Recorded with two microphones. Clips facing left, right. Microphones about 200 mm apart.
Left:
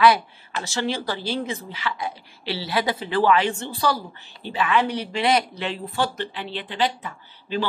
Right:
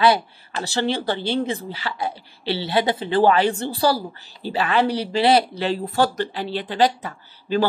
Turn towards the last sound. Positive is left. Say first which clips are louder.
# right 5 dB
turn(degrees=-40)  # may be behind; listen again after turning